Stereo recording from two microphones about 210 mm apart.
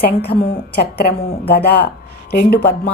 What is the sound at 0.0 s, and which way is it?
A woman's voice, 50° left (ahead or behind).